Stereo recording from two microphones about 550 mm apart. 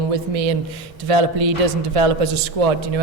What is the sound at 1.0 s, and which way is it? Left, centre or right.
A man's voice, right.